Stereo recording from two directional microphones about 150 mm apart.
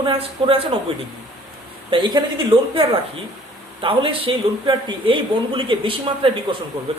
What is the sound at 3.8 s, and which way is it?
Speech, 35° right (ahead or behind).